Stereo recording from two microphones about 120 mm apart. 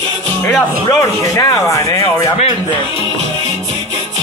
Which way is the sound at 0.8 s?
30° left (ahead or behind).